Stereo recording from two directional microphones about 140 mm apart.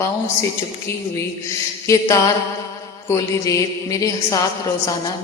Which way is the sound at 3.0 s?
25° left (ahead or behind).